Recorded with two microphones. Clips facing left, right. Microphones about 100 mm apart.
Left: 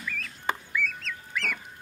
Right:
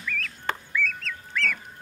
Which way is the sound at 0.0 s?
15° left (ahead or behind).